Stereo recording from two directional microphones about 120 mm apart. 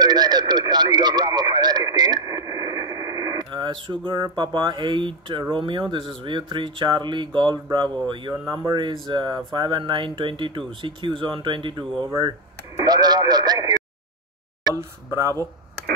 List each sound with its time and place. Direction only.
0.0 s speech: 35° right (ahead or behind)
4.1 s speech: 30° right (ahead or behind)
4.5 s speech: 40° right (ahead or behind)
15.0 s speech: 25° right (ahead or behind)